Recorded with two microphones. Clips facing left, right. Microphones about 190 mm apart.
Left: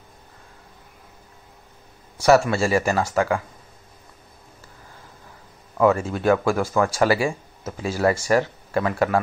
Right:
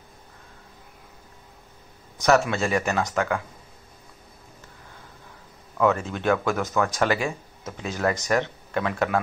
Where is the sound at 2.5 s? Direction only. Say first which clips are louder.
Left 4 dB; 5° left (ahead or behind).